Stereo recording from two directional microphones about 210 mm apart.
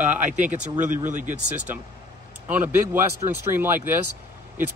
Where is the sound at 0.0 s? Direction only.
10° right (ahead or behind).